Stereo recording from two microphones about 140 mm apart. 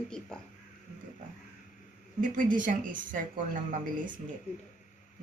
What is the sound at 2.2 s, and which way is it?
Speech, 70° right (ahead or behind).